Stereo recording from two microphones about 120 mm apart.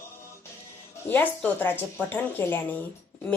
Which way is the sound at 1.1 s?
15° left (ahead or behind).